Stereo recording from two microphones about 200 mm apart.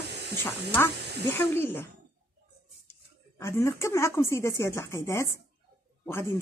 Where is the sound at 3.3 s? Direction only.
15° left (ahead or behind).